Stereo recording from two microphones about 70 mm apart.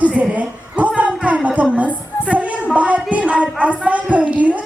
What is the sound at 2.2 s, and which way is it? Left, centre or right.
Music, centre.